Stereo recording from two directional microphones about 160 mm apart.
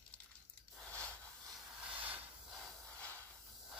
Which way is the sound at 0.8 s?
10° left (ahead or behind).